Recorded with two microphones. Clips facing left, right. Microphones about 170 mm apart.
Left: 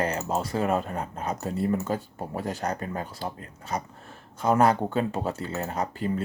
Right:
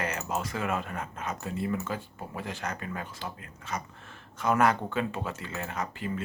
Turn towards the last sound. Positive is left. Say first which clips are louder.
# left 5 dB
turn(degrees=35)  # may be behind; listen again after turning